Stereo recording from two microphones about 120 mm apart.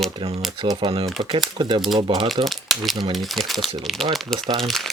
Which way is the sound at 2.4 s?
Centre (ahead or behind).